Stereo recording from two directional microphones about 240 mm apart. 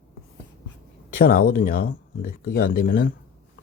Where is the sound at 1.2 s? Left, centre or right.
Left.